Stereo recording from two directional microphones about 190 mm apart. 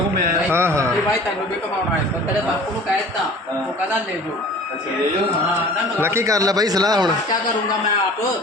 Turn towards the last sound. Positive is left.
turn(degrees=-20)  # may be behind; listen again after turning